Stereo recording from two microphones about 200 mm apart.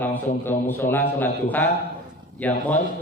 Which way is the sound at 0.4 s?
10° left (ahead or behind).